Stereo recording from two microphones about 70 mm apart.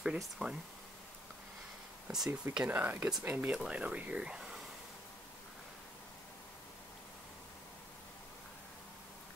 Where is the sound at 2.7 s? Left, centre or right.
Right; by 4.7 s centre.